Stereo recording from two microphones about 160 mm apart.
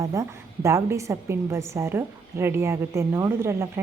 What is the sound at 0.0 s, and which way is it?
A woman's voice, 20° right (ahead or behind).